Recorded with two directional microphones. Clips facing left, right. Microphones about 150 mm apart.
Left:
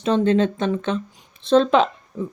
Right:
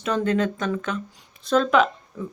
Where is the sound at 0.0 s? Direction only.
25° left (ahead or behind).